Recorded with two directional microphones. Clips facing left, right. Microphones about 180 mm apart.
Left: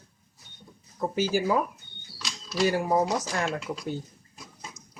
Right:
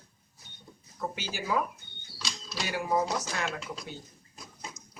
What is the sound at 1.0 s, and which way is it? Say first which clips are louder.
Speech: left 10 dB; 40° left (ahead or behind).